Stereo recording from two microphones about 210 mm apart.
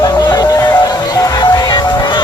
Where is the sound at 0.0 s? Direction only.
15° left (ahead or behind).